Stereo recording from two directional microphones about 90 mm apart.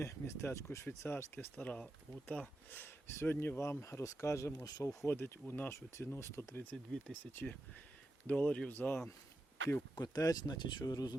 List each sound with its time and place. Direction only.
0.0 s speech: 30° left (ahead or behind)
5.0 s speech: 25° left (ahead or behind)
6.7 s speech: 10° left (ahead or behind)
9.9 s speech: 45° left (ahead or behind)